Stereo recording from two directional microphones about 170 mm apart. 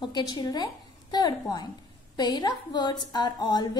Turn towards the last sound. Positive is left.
turn(degrees=25)  # may be behind; listen again after turning